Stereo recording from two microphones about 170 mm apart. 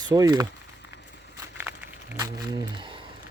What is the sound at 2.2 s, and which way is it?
Speech, 15° right (ahead or behind).